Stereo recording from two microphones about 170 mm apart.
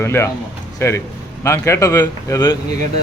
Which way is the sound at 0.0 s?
15° left (ahead or behind).